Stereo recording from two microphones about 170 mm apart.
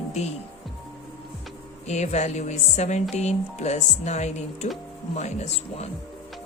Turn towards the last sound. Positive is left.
turn(degrees=40)  # may be behind; listen again after turning